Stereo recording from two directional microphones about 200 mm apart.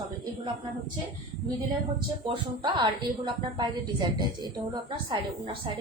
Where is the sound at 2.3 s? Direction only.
25° right (ahead or behind).